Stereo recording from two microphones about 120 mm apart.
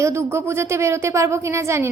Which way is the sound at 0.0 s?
20° right (ahead or behind).